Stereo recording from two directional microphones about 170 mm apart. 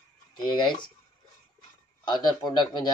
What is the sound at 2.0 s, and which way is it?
Speech, 25° left (ahead or behind).